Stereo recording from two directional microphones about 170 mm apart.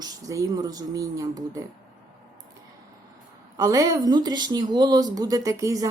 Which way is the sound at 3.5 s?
20° right (ahead or behind).